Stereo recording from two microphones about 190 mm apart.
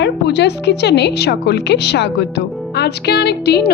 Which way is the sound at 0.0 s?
65° left (ahead or behind).